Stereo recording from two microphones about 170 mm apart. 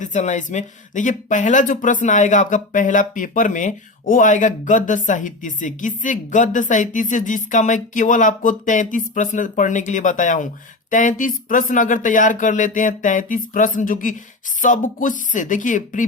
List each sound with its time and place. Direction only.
0.0 s speech: 45° left (ahead or behind)